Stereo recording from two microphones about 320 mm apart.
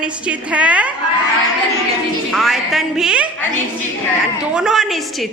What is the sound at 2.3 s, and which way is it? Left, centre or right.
Speech, centre.